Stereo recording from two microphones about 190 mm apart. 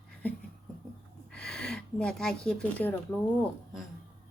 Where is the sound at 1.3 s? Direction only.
5° left (ahead or behind).